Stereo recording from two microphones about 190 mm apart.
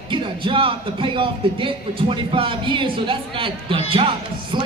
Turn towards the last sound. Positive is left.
turn(degrees=-25)  # may be behind; listen again after turning